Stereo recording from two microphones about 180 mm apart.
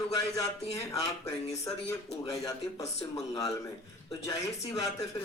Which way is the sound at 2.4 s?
20° left (ahead or behind).